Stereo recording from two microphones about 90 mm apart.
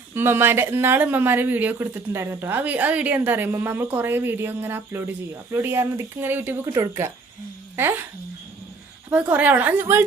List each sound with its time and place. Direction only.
0.1 s a woman's voice: 25° right (ahead or behind)
9.0 s a woman's voice: 20° right (ahead or behind)